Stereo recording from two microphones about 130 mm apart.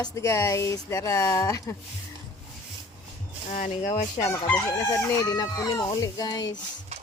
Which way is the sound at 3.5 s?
85° left.